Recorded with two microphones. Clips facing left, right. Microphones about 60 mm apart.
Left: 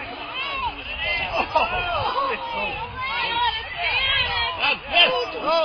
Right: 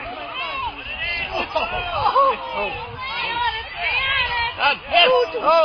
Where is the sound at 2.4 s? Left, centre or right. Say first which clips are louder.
Right 2 dB; centre.